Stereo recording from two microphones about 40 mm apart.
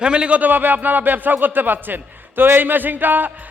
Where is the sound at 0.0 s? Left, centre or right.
Right.